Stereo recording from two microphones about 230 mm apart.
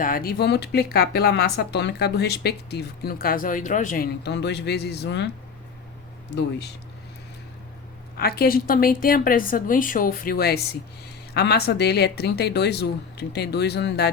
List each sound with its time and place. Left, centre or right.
0.0 s speech: left
8.1 s a woman's voice: left